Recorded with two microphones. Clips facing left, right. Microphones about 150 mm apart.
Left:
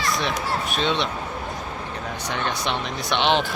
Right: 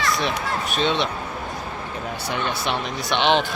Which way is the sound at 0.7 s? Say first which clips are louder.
Right 3 dB; centre (ahead or behind).